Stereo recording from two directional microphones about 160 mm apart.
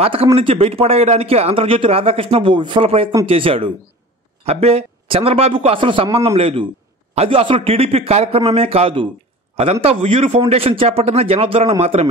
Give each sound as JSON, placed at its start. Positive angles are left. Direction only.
{"t": 0.0, "sound": "a man's voice", "side_deg": -35}